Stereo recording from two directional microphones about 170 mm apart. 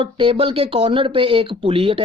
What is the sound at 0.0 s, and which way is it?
Speech, 30° right (ahead or behind).